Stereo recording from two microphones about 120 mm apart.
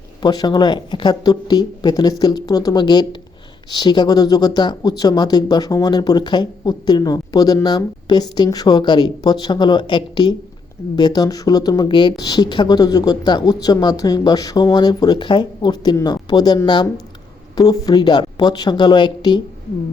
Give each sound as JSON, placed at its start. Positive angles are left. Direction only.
{"t": 0.2, "sound": "speech", "side_deg": 35}